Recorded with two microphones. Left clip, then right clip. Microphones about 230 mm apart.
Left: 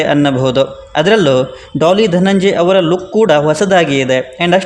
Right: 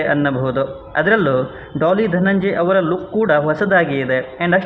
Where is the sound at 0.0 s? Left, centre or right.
Left.